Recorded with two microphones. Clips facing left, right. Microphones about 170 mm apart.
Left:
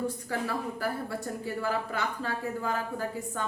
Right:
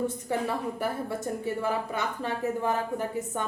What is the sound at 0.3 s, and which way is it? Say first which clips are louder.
A woman's voice: right 3 dB; 20° right (ahead or behind).